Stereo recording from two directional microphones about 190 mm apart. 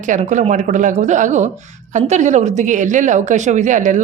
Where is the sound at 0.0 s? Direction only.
40° right (ahead or behind).